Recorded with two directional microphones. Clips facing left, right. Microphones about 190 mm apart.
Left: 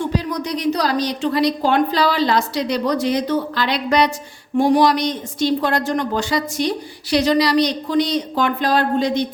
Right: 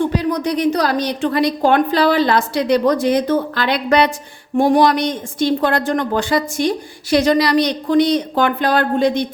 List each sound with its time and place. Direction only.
0.1 s a woman's voice: 55° right (ahead or behind)